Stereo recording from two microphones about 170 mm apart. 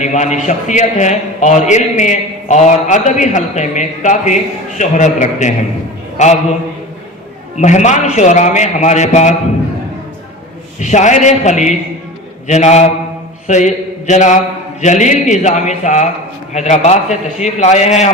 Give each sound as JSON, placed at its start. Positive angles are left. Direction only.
{"t": 0.0, "sound": "a man's voice", "side_deg": 45}
{"t": 7.5, "sound": "a man's voice", "side_deg": 45}
{"t": 10.8, "sound": "a man's voice", "side_deg": 45}